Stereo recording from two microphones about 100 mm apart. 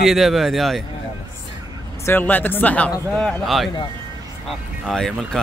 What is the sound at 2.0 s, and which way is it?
Speech, 20° left (ahead or behind).